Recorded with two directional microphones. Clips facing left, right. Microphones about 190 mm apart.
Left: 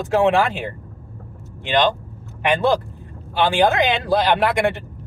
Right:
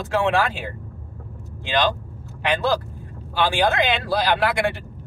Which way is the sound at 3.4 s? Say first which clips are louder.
Left 3 dB; 20° left (ahead or behind).